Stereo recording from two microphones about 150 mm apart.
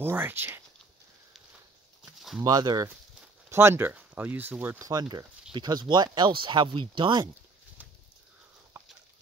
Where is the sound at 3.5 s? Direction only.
15° right (ahead or behind); by 7.2 s 35° right (ahead or behind).